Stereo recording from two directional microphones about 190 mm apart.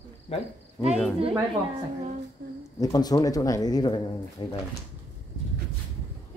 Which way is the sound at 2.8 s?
20° left (ahead or behind).